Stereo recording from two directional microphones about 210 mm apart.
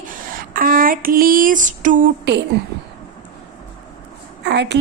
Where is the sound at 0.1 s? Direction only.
40° right (ahead or behind).